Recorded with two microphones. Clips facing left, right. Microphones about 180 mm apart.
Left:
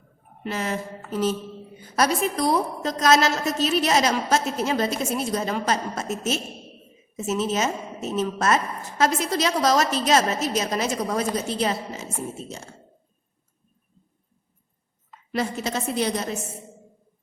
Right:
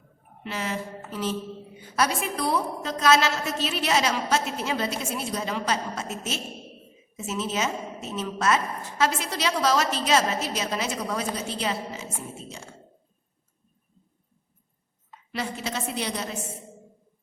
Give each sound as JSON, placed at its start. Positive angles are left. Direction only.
{"t": 0.4, "sound": "a woman's voice", "side_deg": 45}
{"t": 15.3, "sound": "a woman's voice", "side_deg": 45}